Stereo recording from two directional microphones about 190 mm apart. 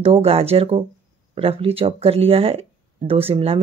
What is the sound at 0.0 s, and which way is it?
Speech, 30° right (ahead or behind).